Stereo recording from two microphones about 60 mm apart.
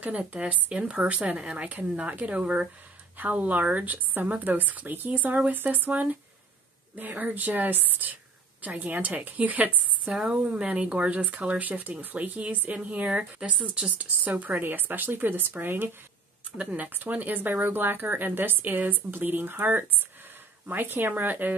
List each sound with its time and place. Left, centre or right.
0.0 s speech: right
14.0 s speech: right